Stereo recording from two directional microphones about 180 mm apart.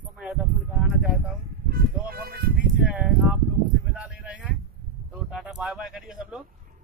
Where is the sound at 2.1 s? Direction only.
55° right (ahead or behind).